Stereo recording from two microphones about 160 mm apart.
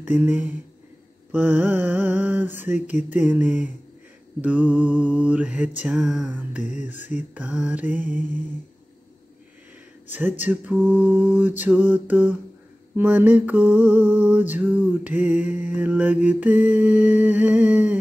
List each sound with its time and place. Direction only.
0.0 s mantra: 10° right (ahead or behind)
6.6 s mantra: 50° left (ahead or behind)
7.3 s mantra: 5° right (ahead or behind)
10.0 s mantra: 10° right (ahead or behind)